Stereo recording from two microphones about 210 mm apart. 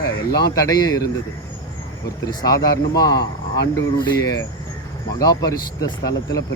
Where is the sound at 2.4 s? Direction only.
15° left (ahead or behind).